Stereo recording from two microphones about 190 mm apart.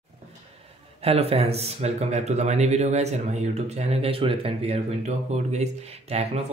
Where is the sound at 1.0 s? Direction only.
30° right (ahead or behind).